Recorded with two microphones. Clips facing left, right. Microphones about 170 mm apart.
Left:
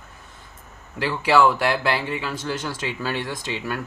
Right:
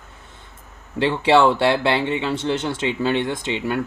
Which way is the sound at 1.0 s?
25° right (ahead or behind).